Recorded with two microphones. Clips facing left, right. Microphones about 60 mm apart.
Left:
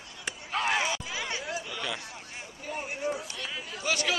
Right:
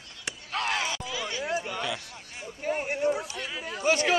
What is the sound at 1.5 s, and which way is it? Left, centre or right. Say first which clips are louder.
Chatter: right 5 dB; right.